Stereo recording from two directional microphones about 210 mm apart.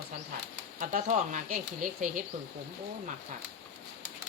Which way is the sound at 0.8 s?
35° right (ahead or behind).